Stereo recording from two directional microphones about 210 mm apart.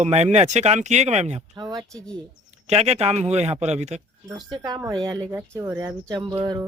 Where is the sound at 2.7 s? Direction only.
30° right (ahead or behind).